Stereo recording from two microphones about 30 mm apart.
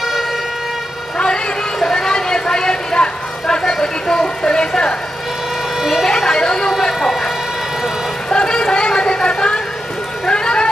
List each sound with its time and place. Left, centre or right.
1.1 s vehicle: left
1.8 s vehicle: centre
4.4 s a woman's voice: left
6.0 s vehicle: centre
6.9 s siren: centre
8.3 s vehicle: left
9.0 s a sound: left
10.2 s vehicle: left